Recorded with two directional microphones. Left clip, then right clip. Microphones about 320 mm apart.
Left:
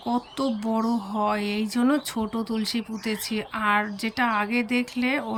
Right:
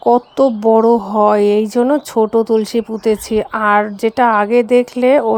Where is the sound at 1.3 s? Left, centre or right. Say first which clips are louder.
Right 15 dB; centre.